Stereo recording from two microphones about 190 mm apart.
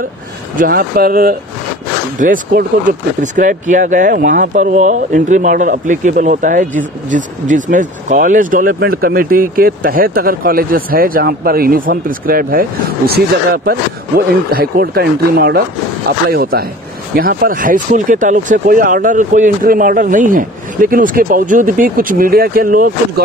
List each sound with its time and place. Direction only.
0.6 s speech: 50° right (ahead or behind)